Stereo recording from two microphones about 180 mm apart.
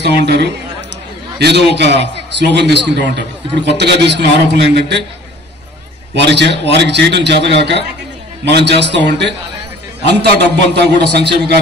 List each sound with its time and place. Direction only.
1.4 s a man's voice: 70° right (ahead or behind)
6.1 s a man's voice: 75° right (ahead or behind)
10.0 s a man's voice: 70° right (ahead or behind)